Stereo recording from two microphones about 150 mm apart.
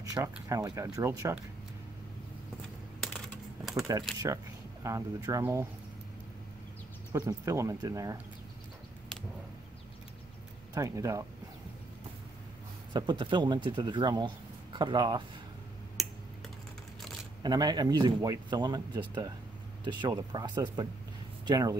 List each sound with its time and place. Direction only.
0.0 s speech: 20° right (ahead or behind)
3.9 s speech: 25° right (ahead or behind)
7.1 s speech: 25° right (ahead or behind)
10.7 s speech: 20° right (ahead or behind)
12.9 s speech: 30° right (ahead or behind)
16.0 s computer keyboard: centre (ahead or behind)
17.4 s speech: 25° right (ahead or behind)